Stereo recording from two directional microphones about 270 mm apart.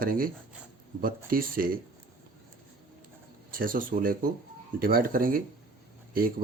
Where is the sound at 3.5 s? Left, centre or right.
Right.